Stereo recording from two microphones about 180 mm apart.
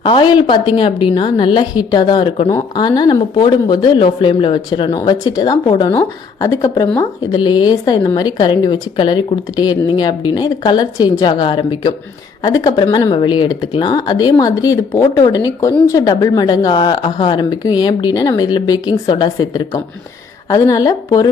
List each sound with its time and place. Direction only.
0.0 s a woman's voice: 25° left (ahead or behind)